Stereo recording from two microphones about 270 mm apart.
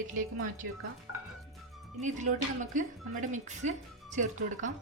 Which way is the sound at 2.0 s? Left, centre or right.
Right.